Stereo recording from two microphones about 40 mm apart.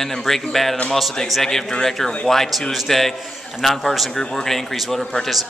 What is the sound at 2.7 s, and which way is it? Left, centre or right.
A man's voice, centre.